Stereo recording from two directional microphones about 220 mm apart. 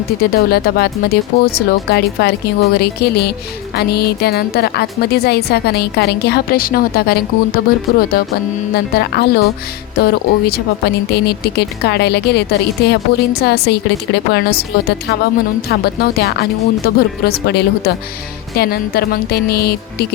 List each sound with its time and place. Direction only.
0.2 s speech: 45° left (ahead or behind)